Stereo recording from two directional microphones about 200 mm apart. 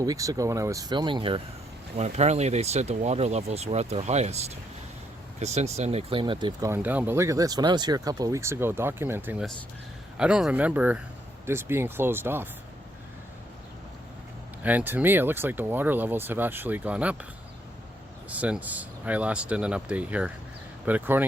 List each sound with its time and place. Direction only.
0.0 s speech: 15° right (ahead or behind)
14.6 s speech: 10° right (ahead or behind)
18.3 s speech: 5° right (ahead or behind)